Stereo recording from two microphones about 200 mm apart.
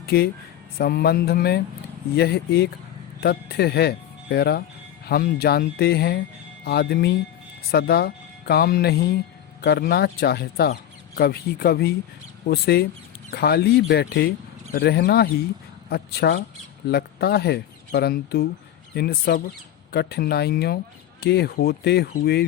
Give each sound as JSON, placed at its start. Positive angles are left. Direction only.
{"t": 0.0, "sound": "speech", "side_deg": 50}